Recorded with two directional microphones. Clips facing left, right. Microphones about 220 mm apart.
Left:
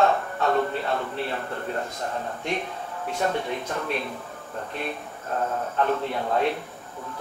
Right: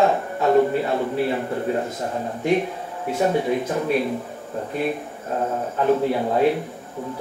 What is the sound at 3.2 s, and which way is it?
Speech, 10° right (ahead or behind).